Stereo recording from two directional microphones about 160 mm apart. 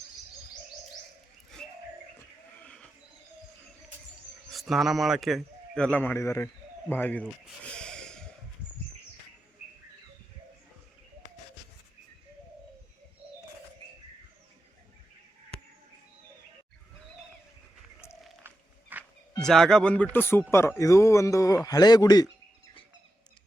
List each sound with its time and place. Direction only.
4.5 s speech: centre (ahead or behind)
7.6 s snort: 5° left (ahead or behind)
18.4 s walk: 10° right (ahead or behind)
19.4 s a man's voice: 5° left (ahead or behind); by 22.3 s 25° left (ahead or behind)